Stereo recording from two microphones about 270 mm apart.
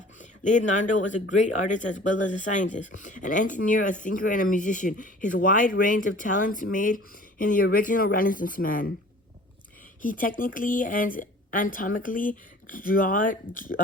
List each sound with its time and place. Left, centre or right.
0.2 s speech: left
10.0 s speech: left